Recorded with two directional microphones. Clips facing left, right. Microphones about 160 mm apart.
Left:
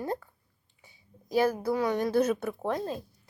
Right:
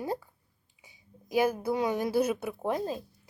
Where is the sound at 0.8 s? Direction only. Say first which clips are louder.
Left 2 dB; 15° right (ahead or behind).